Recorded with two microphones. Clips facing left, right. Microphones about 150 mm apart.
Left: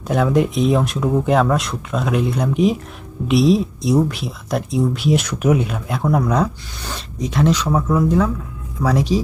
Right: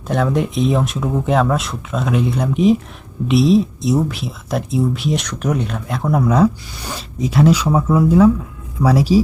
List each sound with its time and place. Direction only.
0.1 s speech: centre (ahead or behind)